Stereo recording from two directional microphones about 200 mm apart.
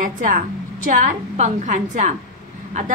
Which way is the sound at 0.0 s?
40° right (ahead or behind).